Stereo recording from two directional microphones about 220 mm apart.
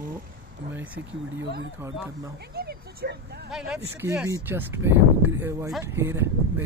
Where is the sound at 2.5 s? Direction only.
45° right (ahead or behind).